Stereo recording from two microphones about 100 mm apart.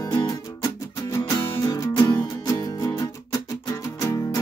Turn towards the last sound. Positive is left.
turn(degrees=35)  # may be behind; listen again after turning